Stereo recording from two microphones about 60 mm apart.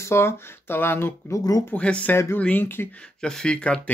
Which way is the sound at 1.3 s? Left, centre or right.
Left.